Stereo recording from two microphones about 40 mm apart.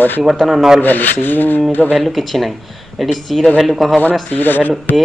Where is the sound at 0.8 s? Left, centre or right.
Left.